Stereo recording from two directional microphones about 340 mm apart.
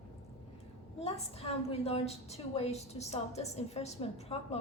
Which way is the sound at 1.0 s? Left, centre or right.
Centre.